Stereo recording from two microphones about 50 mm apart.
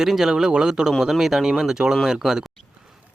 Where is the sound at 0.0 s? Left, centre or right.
Centre.